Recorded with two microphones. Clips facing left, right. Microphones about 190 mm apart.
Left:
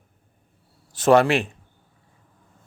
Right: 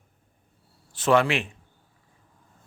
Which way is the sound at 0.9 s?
40° left (ahead or behind).